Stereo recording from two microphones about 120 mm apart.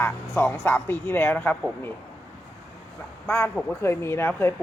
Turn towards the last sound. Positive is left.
turn(degrees=20)  # may be behind; listen again after turning